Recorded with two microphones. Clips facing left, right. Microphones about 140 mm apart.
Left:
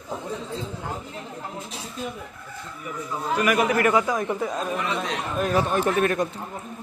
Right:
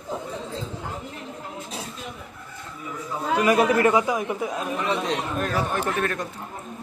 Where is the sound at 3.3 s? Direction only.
25° right (ahead or behind).